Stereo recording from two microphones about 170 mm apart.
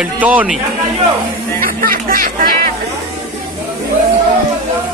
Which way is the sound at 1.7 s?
55° right (ahead or behind).